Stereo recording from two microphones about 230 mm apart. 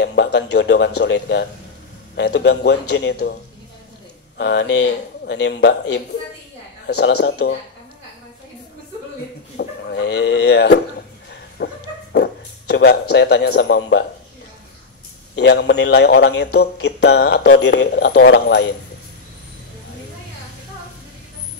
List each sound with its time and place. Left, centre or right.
0.0 s speech: left
4.4 s speech: left
9.6 s speech: left
15.3 s speech: left